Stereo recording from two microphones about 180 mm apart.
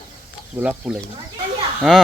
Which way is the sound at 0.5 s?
10° right (ahead or behind).